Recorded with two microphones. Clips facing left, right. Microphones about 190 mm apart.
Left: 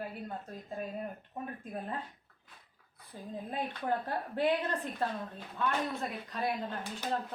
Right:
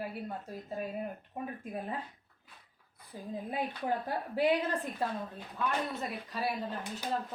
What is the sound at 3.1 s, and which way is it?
A woman's voice, 10° right (ahead or behind).